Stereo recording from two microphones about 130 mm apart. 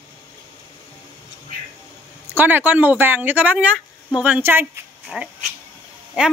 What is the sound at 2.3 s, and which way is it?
A man's voice, 15° right (ahead or behind).